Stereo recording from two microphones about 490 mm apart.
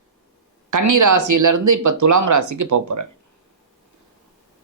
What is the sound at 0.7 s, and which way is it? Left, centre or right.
Speech, right.